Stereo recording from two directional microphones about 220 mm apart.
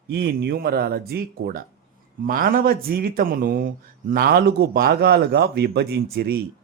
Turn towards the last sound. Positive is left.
turn(degrees=-45)  # may be behind; listen again after turning